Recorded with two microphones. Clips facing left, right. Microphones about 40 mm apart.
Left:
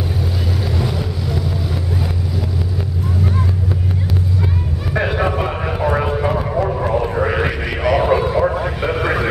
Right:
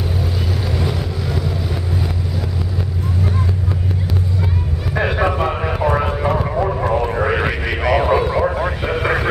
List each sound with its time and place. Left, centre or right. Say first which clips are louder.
0.7 s vehicle: even; centre
4.9 s vehicle: even; centre